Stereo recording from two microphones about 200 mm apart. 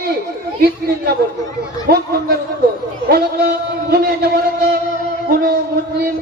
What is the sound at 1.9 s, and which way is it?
Speech, 50° right (ahead or behind).